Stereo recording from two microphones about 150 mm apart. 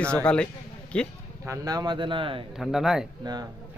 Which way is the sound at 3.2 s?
25° right (ahead or behind).